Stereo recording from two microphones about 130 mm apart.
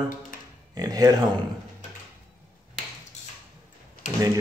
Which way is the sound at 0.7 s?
30° right (ahead or behind).